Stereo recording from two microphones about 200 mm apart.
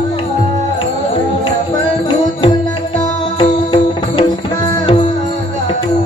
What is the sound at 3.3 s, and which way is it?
Music, 25° left (ahead or behind).